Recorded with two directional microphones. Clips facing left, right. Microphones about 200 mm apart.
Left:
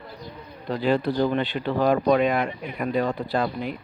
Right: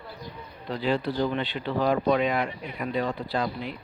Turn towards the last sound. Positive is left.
turn(degrees=50)  # may be behind; listen again after turning